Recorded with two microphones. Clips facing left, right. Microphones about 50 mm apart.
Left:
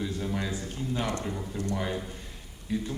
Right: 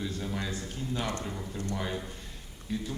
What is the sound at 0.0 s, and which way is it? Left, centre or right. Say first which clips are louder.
A man's voice: left 3 dB; centre.